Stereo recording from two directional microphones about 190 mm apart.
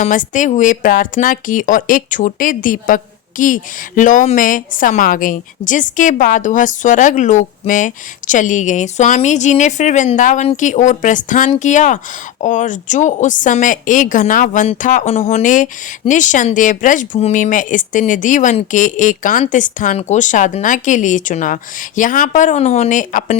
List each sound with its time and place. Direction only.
0.0 s speech: 40° left (ahead or behind)